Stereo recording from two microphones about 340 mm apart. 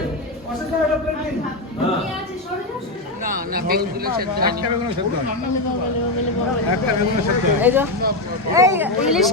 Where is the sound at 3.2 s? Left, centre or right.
Right.